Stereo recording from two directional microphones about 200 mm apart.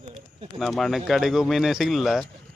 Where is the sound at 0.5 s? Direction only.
Centre (ahead or behind).